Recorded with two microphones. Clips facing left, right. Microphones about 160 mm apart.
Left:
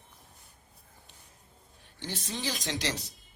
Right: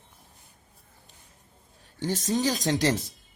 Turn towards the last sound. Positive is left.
turn(degrees=-45)  # may be behind; listen again after turning